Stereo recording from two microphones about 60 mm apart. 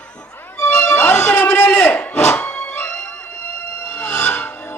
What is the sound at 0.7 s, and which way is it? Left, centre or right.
Music, centre.